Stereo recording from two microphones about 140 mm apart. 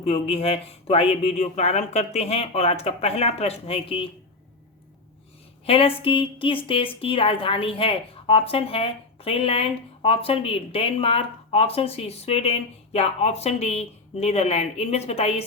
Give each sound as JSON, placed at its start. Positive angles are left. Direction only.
{"t": 0.0, "sound": "a woman's voice", "side_deg": 45}
{"t": 5.6, "sound": "a woman's voice", "side_deg": 40}